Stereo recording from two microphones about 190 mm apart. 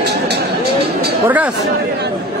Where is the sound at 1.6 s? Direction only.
60° right (ahead or behind).